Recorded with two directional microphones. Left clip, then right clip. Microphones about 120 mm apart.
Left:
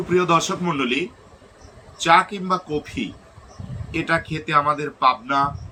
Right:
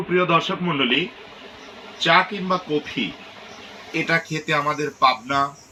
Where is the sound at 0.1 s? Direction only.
30° left (ahead or behind).